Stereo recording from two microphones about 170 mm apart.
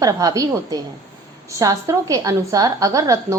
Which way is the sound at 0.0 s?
20° right (ahead or behind).